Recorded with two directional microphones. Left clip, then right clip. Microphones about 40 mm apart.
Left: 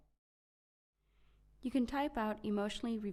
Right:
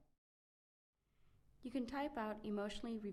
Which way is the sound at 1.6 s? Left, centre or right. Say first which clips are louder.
Left 7 dB; left.